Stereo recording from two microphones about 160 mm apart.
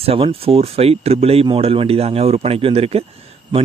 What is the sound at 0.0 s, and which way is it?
Speech, 35° right (ahead or behind).